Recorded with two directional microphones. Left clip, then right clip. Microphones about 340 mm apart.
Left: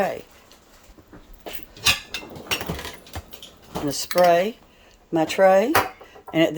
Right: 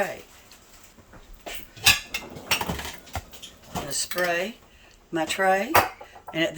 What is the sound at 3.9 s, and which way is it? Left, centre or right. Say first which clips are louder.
Speech: left 9 dB; centre.